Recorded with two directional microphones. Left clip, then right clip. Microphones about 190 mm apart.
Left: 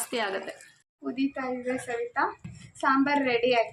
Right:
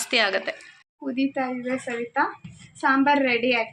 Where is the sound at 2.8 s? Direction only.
25° right (ahead or behind).